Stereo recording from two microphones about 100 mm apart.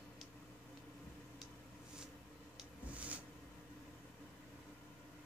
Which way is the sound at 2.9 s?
15° right (ahead or behind).